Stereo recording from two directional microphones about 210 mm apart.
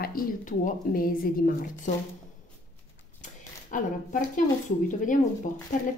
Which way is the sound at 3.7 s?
40° left (ahead or behind).